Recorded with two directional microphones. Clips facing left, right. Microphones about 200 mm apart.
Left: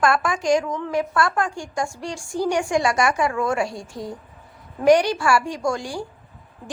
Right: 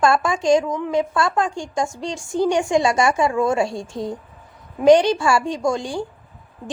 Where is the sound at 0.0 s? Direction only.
25° right (ahead or behind).